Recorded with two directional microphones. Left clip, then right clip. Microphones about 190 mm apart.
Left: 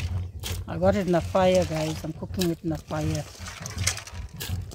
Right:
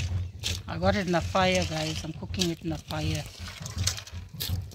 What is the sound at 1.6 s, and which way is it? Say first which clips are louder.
Speech: left 3 dB; 35° left (ahead or behind).